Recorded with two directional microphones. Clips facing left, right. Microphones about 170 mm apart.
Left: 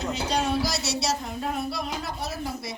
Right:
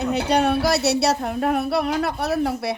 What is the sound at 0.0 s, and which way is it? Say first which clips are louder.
Speech: right 7 dB; 60° right (ahead or behind).